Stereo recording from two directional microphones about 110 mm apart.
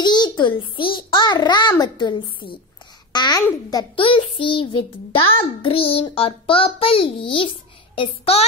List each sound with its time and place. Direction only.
0.0 s a child's voice: 40° left (ahead or behind)
3.9 s a child's voice: 50° left (ahead or behind)